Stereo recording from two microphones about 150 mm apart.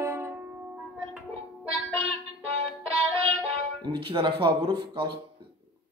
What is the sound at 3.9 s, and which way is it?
Speech, 35° right (ahead or behind).